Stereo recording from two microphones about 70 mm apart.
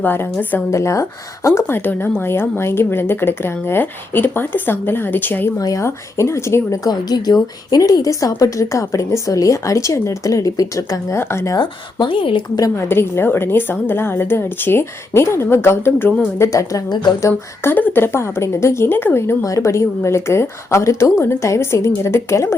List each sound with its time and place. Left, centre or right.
0.0 s a woman's voice: left
0.7 s a woman's voice: left
1.6 s speech: left
5.5 s a woman's voice: left
5.8 s speech: left
6.8 s a woman's voice: left
11.2 s speech: left
11.5 s speech: left
12.9 s speech: left
16.4 s a woman's voice: left
17.7 s speech: left
19.4 s speech: left